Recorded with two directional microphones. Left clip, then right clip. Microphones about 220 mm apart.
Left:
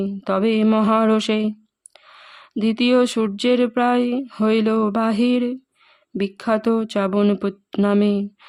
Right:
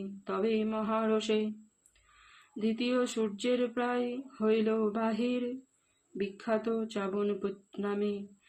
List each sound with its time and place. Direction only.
0.3 s speech: 50° left (ahead or behind)